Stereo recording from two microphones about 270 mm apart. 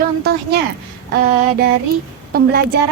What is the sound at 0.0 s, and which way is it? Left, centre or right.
A woman's voice, right.